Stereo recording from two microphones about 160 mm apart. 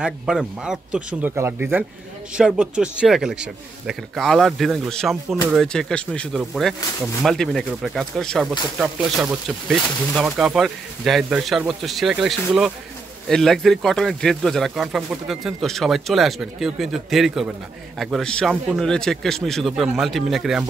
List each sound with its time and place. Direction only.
0.0 s a man's voice: 5° right (ahead or behind)